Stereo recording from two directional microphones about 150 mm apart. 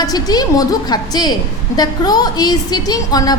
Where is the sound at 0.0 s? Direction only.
25° left (ahead or behind).